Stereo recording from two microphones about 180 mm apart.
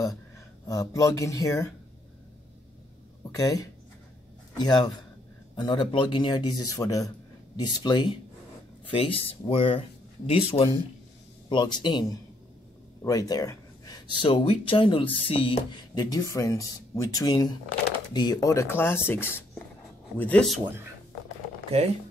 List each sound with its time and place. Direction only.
0.7 s speech: 20° left (ahead or behind)
3.3 s speech: 20° left (ahead or behind); by 20.6 s centre (ahead or behind)